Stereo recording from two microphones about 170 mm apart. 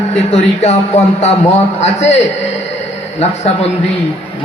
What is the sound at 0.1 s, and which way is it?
A man's voice, 40° left (ahead or behind).